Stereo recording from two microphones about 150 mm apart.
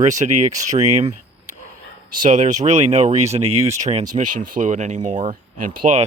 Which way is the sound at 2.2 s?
55° right (ahead or behind).